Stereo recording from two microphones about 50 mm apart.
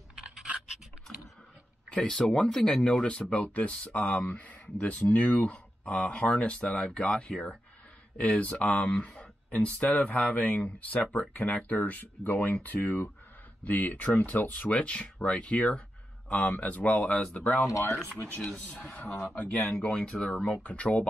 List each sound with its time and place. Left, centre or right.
1.9 s speech: centre; by 14.7 s left
14.7 s speech: left
16.5 s speech: left
17.1 s speech: centre
17.4 s speech: left
18.9 s speech: left
19.4 s speech: left
19.9 s speech: centre